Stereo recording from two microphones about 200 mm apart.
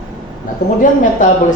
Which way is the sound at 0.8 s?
40° left (ahead or behind).